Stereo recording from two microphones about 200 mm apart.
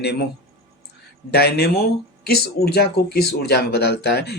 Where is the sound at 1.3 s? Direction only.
55° left (ahead or behind).